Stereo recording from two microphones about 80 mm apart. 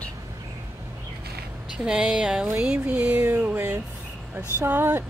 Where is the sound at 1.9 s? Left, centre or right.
Centre.